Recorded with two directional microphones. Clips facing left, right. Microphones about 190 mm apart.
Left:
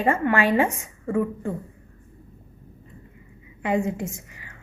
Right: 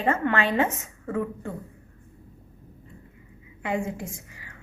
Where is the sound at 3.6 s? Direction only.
20° left (ahead or behind).